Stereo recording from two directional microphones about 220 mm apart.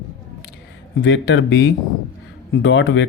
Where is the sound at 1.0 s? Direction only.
55° left (ahead or behind).